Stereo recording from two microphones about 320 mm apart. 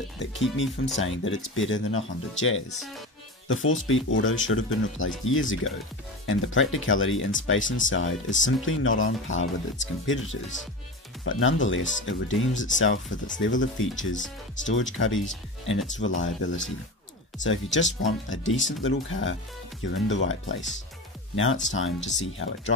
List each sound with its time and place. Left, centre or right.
0.2 s speech: left